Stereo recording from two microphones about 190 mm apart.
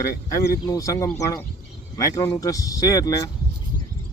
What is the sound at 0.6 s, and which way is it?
Speech, 20° left (ahead or behind).